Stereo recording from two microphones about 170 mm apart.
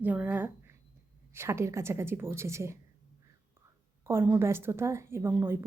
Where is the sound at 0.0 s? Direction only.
10° right (ahead or behind).